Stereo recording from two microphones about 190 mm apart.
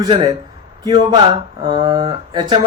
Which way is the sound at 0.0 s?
20° right (ahead or behind).